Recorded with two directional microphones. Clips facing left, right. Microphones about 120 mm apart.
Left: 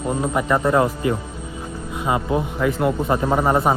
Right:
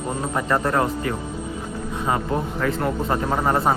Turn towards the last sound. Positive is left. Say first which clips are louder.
# left 3 dB
turn(degrees=15)  # may be behind; listen again after turning